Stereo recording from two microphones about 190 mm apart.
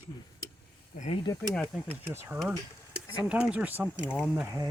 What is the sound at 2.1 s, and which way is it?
Speech, 10° right (ahead or behind).